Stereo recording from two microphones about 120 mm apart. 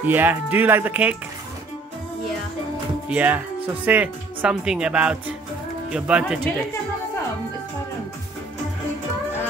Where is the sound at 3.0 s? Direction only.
10° right (ahead or behind).